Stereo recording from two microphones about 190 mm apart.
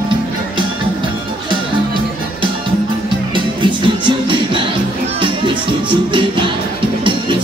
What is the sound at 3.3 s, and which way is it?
Music, 25° right (ahead or behind).